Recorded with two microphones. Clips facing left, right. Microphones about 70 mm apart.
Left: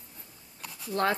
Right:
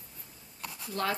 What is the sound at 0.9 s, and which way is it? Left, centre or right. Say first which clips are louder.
Speech: left 5 dB; left.